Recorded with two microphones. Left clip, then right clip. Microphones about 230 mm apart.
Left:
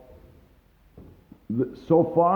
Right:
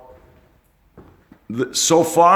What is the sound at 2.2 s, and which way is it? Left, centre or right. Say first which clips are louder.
Speech: right 10 dB; centre.